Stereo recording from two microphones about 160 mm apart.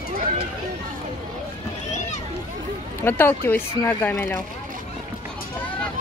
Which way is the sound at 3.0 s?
15° left (ahead or behind).